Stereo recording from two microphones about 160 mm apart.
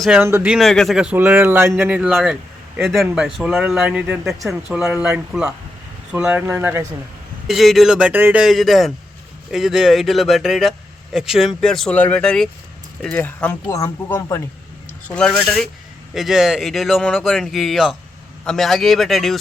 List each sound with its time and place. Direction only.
0.0 s speech: 5° right (ahead or behind)
0.3 s a man's voice: 15° right (ahead or behind)
0.5 s a man's voice: centre (ahead or behind); by 6.8 s 15° right (ahead or behind)
7.4 s speech: centre (ahead or behind); by 14.4 s 15° left (ahead or behind)
15.0 s speech: 5° left (ahead or behind)